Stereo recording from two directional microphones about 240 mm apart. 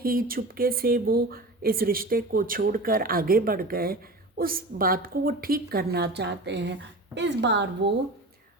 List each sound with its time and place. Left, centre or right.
0.0 s a woman's voice: right